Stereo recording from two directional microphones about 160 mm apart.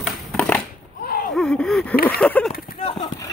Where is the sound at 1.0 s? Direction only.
65° left (ahead or behind).